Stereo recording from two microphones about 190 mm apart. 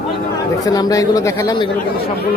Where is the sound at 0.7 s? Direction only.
20° left (ahead or behind).